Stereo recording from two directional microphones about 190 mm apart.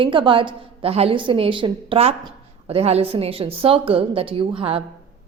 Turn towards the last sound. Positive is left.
turn(degrees=-25)  # may be behind; listen again after turning